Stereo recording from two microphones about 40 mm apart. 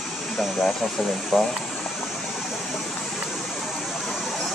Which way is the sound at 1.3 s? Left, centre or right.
Centre.